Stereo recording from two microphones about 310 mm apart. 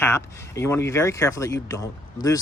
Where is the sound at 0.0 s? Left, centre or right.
Centre.